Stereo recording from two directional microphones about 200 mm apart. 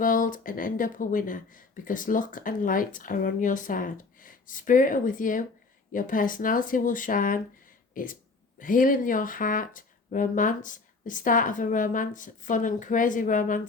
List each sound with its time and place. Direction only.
0.0 s speech: 40° left (ahead or behind)